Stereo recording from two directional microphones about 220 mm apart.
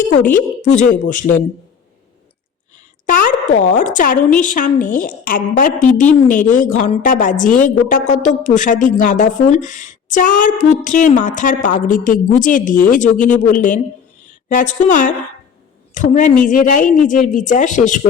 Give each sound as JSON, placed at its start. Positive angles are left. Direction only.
{"t": 0.6, "sound": "a woman's voice", "side_deg": 35}
{"t": 3.1, "sound": "a sound", "side_deg": 35}
{"t": 3.7, "sound": "a woman's voice", "side_deg": 35}